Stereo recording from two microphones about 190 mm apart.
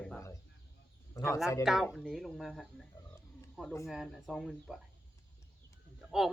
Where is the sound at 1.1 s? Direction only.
15° left (ahead or behind).